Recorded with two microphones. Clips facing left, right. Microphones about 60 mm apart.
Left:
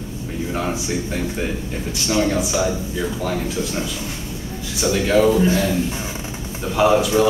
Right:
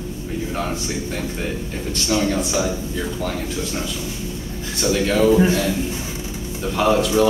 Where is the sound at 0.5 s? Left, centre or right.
Centre.